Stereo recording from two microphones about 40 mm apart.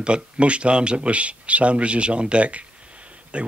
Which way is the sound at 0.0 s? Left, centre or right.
Right.